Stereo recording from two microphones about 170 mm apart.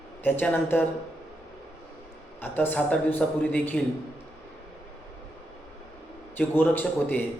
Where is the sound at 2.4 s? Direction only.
10° left (ahead or behind).